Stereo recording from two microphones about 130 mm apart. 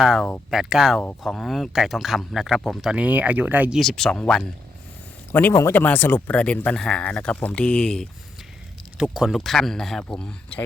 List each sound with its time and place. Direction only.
0.0 s speech: centre (ahead or behind)
3.8 s speech: centre (ahead or behind)
5.3 s speech: 15° left (ahead or behind)